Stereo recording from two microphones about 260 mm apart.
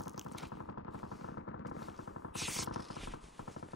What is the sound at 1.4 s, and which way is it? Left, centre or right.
Machine gun, left.